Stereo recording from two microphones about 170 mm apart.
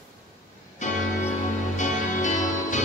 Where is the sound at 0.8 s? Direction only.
45° left (ahead or behind).